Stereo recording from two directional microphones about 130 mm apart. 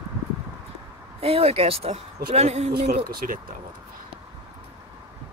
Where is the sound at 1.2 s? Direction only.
50° right (ahead or behind).